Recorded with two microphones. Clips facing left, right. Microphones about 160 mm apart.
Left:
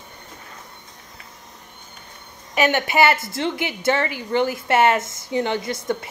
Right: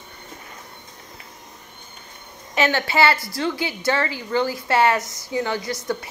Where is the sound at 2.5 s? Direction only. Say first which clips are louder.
Left 1 dB; 15° left (ahead or behind).